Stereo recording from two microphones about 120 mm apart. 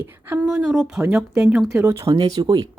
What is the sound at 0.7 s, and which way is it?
Speech, 5° right (ahead or behind).